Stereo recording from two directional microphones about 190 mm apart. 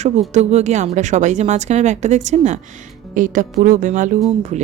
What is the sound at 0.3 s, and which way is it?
A woman's voice, 35° right (ahead or behind).